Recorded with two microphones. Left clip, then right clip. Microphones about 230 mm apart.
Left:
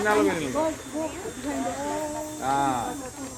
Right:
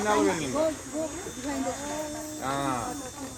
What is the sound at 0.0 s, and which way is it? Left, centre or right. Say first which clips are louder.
Speech: left 2 dB; right.